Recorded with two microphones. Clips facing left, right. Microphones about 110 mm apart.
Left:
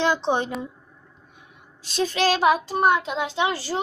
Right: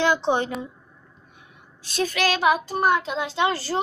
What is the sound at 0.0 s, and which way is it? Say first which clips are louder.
Speech: right 1 dB; 25° left (ahead or behind).